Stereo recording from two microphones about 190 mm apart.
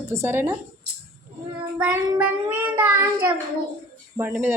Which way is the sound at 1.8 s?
10° right (ahead or behind).